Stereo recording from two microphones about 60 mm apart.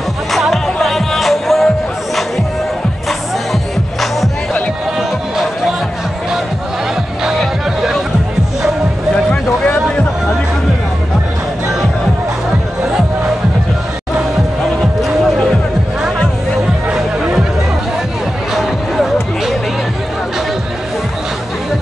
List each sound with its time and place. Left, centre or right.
0.3 s music: centre
7.3 s music: centre
14.8 s music: centre
18.5 s music: centre